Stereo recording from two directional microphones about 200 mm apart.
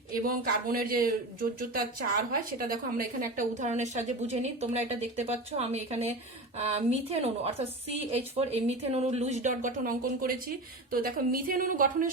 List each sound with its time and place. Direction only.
0.3 s a woman's voice: 45° right (ahead or behind)